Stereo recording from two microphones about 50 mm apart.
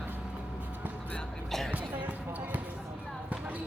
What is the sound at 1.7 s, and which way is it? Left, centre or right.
Basketball bounce, right.